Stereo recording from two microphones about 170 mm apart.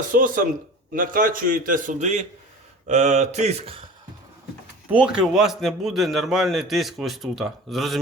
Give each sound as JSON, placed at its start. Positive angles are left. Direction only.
{"t": 0.1, "sound": "a man's voice", "side_deg": -50}
{"t": 4.9, "sound": "a man's voice", "side_deg": -5}